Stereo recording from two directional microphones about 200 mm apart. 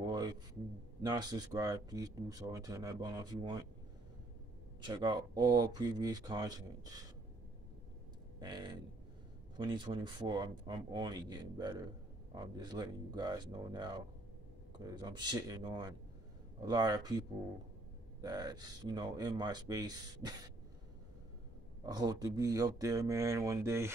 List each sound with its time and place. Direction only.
0.0 s a sound: 20° right (ahead or behind)
1.0 s speech: 20° right (ahead or behind)
4.8 s speech: 20° right (ahead or behind)
8.4 s speech: 20° right (ahead or behind)
18.2 s speech: 20° right (ahead or behind)
21.8 s speech: 20° right (ahead or behind)